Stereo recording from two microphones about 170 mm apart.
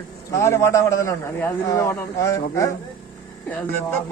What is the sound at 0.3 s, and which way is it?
Speech, 20° left (ahead or behind).